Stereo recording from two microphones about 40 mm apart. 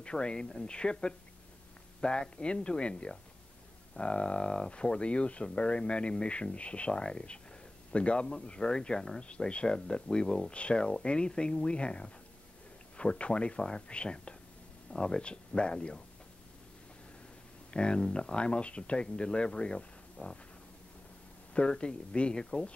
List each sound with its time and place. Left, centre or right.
0.0 s speech: left
17.7 s speech: left
21.5 s speech: left